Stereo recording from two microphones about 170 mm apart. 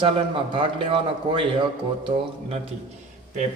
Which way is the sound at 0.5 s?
30° right (ahead or behind).